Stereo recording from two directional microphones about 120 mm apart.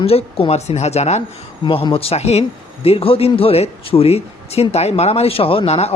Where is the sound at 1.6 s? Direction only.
45° left (ahead or behind); by 2.4 s 60° left (ahead or behind).